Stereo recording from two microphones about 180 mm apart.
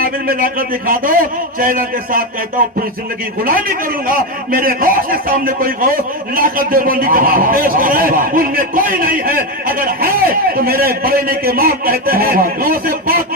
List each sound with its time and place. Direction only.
0.0 s a man's voice: 55° right (ahead or behind)